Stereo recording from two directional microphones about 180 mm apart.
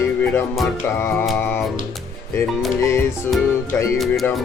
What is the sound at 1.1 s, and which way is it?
Mantra, 5° left (ahead or behind).